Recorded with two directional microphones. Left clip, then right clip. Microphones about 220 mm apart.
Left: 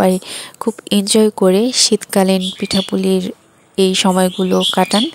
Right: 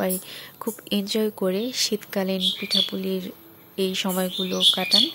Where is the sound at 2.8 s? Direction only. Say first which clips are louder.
Left 12 dB; 45° left (ahead or behind).